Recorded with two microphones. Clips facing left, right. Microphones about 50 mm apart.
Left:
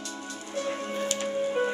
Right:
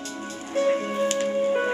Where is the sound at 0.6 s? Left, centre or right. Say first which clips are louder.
Right 8 dB; right.